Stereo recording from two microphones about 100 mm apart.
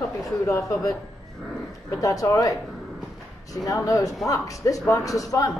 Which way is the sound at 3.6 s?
35° left (ahead or behind).